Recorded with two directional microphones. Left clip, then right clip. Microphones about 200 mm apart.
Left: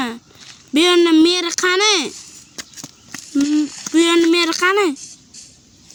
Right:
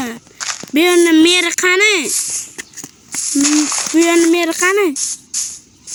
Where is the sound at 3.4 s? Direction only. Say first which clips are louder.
Right 5 dB; 50° right (ahead or behind).